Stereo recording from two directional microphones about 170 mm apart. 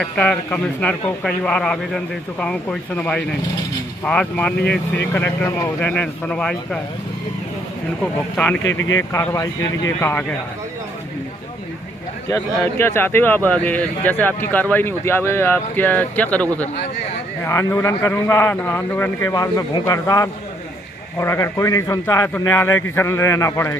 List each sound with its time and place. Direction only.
0.0 s speech: 5° left (ahead or behind)
8.0 s speech: 10° left (ahead or behind)
12.3 s speech: 15° left (ahead or behind)
17.5 s speech: 15° left (ahead or behind)